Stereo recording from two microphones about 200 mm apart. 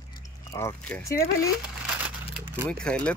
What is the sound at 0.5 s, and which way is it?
Speech, 15° left (ahead or behind).